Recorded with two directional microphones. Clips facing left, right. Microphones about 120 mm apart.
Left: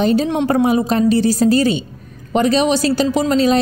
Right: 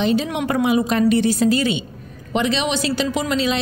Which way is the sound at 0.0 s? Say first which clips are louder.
Left 4 dB; 40° left (ahead or behind).